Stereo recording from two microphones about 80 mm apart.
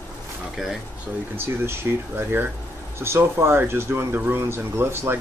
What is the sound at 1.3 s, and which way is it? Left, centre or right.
Speech, right.